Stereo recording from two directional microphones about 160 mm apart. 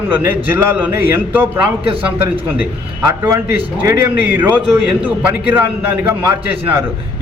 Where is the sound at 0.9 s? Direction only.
15° right (ahead or behind).